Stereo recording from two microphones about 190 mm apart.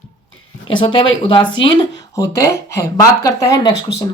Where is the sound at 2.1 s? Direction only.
15° left (ahead or behind).